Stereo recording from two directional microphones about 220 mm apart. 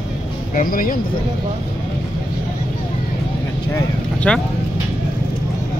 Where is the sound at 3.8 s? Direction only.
5° left (ahead or behind).